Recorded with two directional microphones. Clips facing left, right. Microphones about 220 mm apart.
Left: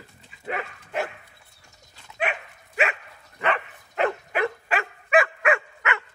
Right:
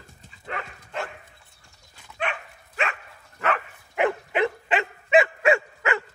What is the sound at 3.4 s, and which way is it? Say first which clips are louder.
Dog: even; centre (ahead or behind).